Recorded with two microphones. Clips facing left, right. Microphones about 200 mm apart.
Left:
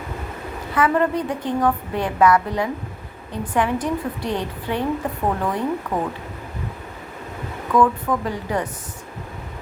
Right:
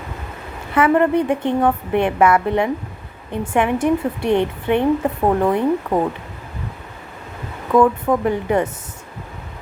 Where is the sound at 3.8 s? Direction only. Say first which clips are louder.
Right 7 dB; 60° right (ahead or behind).